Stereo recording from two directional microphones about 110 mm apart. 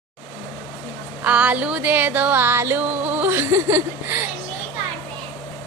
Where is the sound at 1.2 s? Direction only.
15° right (ahead or behind).